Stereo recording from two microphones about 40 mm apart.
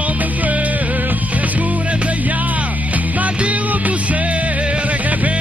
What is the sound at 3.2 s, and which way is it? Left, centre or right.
Music, right.